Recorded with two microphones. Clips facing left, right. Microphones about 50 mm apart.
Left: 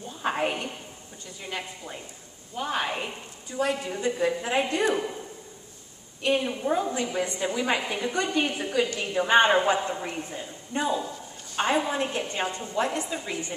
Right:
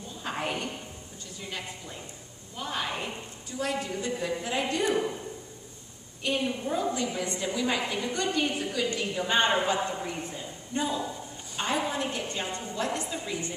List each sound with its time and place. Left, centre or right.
0.2 s a sound: left
1.5 s a woman's voice: left
6.2 s a woman's voice: left